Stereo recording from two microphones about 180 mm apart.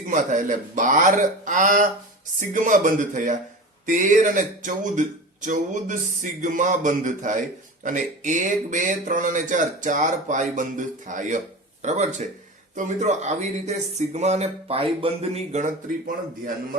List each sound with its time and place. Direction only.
0.1 s speech: 45° right (ahead or behind)